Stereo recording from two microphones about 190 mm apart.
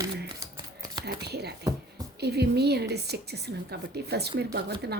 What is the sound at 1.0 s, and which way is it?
A woman's voice, 60° right (ahead or behind).